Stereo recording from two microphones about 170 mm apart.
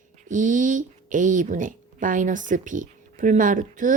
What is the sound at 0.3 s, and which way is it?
A woman's voice, 50° right (ahead or behind).